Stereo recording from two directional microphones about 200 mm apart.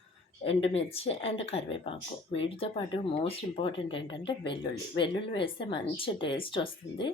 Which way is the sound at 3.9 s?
65° left (ahead or behind).